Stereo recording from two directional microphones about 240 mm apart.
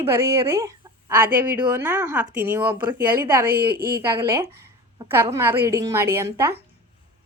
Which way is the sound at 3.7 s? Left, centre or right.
Right.